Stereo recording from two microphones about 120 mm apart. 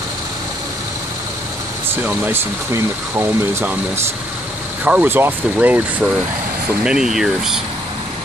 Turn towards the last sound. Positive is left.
turn(degrees=-5)  # may be behind; listen again after turning